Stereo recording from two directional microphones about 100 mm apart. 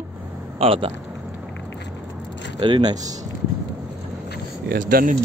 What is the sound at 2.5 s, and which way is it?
Speech, 55° right (ahead or behind).